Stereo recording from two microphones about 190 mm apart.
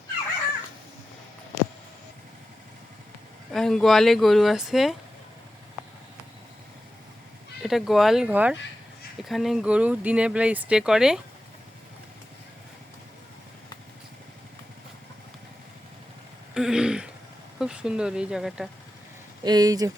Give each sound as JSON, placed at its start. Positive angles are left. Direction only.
{"t": 3.5, "sound": "speech", "side_deg": 0}
{"t": 7.6, "sound": "speech", "side_deg": 0}
{"t": 16.6, "sound": "throat clearing", "side_deg": -5}
{"t": 17.6, "sound": "speech", "side_deg": -5}
{"t": 19.5, "sound": "speech", "side_deg": -20}